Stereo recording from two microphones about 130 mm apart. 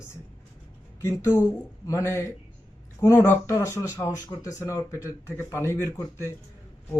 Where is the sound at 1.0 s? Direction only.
20° left (ahead or behind).